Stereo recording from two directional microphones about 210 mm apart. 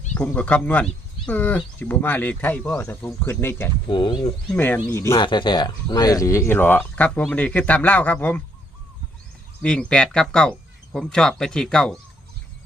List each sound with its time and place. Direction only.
0.1 s speech: 5° left (ahead or behind)
3.8 s speech: 20° left (ahead or behind)
4.5 s speech: 5° left (ahead or behind)
9.6 s speech: 5° left (ahead or behind)